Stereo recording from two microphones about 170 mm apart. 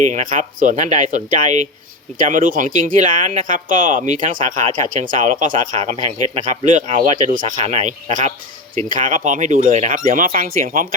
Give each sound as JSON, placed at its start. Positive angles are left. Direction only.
{"t": 0.1, "sound": "speech", "side_deg": -50}